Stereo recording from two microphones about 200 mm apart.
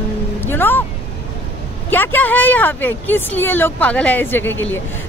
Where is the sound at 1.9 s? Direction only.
10° left (ahead or behind).